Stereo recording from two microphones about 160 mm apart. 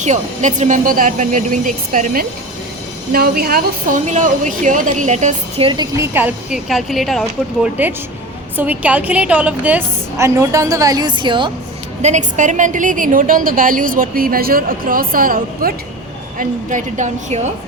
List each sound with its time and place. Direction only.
0.0 s a woman's voice: 50° right (ahead or behind)
3.1 s a woman's voice: 75° right (ahead or behind); by 6.1 s 25° right (ahead or behind)
6.1 s a woman's voice: 10° right (ahead or behind)
8.5 s a woman's voice: 10° right (ahead or behind); by 11.5 s 30° right (ahead or behind)
12.0 s a woman's voice: 50° right (ahead or behind)